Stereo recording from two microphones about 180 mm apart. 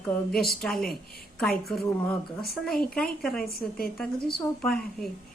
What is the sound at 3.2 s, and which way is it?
Speech, centre (ahead or behind).